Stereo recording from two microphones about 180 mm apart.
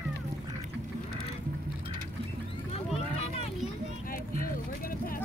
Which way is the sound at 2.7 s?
35° left (ahead or behind).